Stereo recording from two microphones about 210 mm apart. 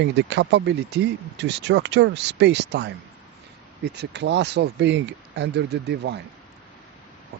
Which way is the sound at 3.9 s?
55° right (ahead or behind).